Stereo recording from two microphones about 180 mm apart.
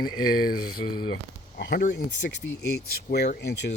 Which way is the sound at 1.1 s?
70° left (ahead or behind).